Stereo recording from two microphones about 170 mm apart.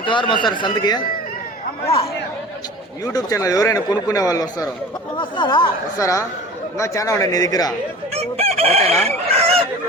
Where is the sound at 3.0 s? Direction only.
20° left (ahead or behind).